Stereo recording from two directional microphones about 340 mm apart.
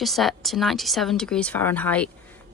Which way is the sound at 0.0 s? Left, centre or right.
Centre.